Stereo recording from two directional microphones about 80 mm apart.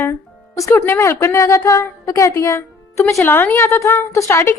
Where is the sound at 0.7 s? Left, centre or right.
Left.